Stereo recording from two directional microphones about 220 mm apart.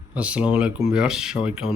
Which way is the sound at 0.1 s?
5° right (ahead or behind).